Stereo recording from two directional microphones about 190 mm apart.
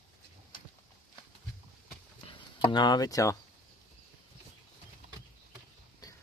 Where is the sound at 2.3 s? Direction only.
25° left (ahead or behind).